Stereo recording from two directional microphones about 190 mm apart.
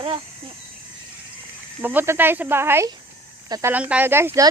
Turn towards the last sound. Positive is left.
turn(degrees=-15)  # may be behind; listen again after turning